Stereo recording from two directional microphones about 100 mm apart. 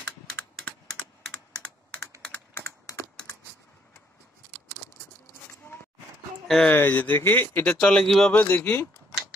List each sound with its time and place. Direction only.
2.2 s computer keyboard: 15° left (ahead or behind)
5.7 s a sound: 20° left (ahead or behind)
6.4 s speech: 5° left (ahead or behind)
6.7 s speech: 20° left (ahead or behind)
7.8 s speech: 5° left (ahead or behind)
8.3 s speech: 20° left (ahead or behind)